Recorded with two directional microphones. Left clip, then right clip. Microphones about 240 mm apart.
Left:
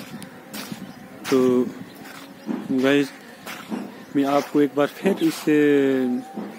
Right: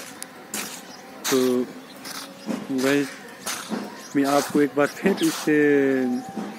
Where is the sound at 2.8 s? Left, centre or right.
Left.